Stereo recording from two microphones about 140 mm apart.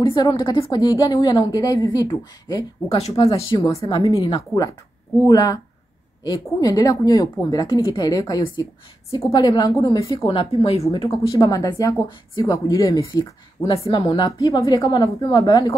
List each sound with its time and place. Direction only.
0.0 s a woman's voice: 30° left (ahead or behind)
11.1 s a woman's voice: 25° left (ahead or behind)
13.8 s a woman's voice: 40° left (ahead or behind)